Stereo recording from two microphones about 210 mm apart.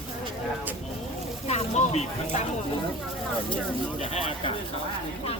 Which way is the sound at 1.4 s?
30° left (ahead or behind).